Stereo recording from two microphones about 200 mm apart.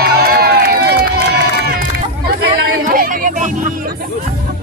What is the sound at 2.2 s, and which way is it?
Hubbub, 45° right (ahead or behind).